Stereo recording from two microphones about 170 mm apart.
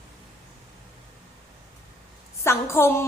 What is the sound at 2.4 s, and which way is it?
Speech, 15° left (ahead or behind).